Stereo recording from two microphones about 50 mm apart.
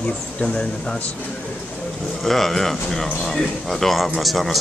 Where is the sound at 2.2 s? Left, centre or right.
Centre.